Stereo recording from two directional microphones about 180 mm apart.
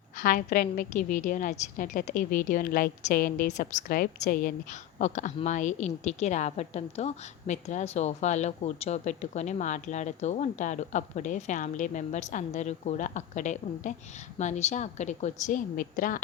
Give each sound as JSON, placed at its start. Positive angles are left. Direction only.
{"t": 0.2, "sound": "a woman's voice", "side_deg": 50}
{"t": 4.9, "sound": "a woman's voice", "side_deg": 45}